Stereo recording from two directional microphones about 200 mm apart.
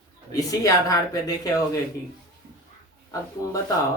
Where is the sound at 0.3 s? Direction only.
15° left (ahead or behind).